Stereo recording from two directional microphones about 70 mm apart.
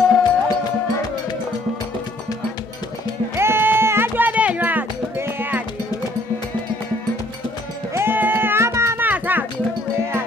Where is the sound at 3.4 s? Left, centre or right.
Right.